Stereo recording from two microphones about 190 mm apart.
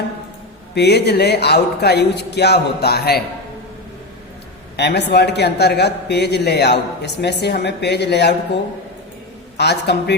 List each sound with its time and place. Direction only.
0.7 s a man's voice: 60° left (ahead or behind)
4.8 s a man's voice: 60° left (ahead or behind)
9.6 s a man's voice: 60° left (ahead or behind)